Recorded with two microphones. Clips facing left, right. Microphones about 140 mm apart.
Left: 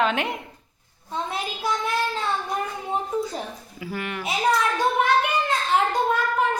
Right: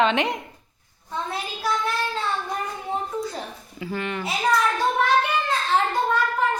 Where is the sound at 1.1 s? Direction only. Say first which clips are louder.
Left 1 dB; 20° left (ahead or behind).